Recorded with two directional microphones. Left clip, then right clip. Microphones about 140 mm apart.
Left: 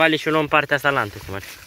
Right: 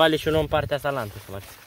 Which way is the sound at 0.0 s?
25° right (ahead or behind).